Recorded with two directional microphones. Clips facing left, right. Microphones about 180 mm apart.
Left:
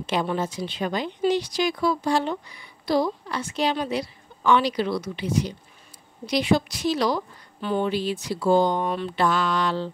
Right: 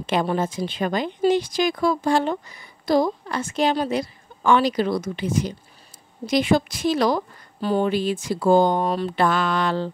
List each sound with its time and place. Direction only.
0.0 s a woman's voice: 50° right (ahead or behind)